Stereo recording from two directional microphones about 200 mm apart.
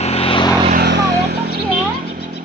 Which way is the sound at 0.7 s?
55° right (ahead or behind).